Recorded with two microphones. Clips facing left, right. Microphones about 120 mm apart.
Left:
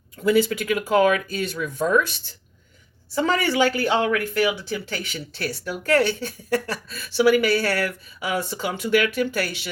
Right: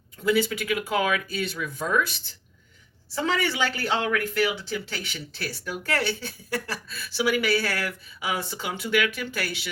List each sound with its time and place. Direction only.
0.3 s speech: 45° left (ahead or behind)
3.2 s speech: 45° left (ahead or behind)